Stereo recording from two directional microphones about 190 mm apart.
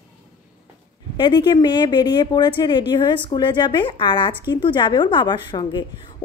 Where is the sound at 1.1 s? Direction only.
25° left (ahead or behind).